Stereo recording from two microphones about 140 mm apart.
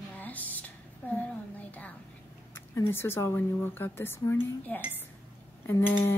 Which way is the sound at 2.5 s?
15° left (ahead or behind).